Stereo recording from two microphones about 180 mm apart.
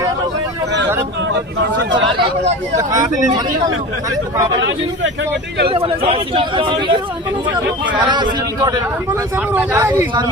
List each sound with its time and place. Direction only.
2.7 s speech: 20° right (ahead or behind)
5.6 s speech: 30° right (ahead or behind)
8.0 s speech: 25° right (ahead or behind)
9.5 s speech: 10° right (ahead or behind)